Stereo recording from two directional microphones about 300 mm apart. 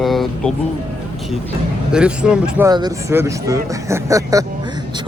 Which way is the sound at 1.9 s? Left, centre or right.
Centre.